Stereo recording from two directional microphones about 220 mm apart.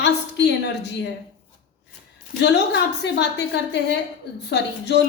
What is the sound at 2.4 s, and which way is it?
A woman's voice, 50° left (ahead or behind).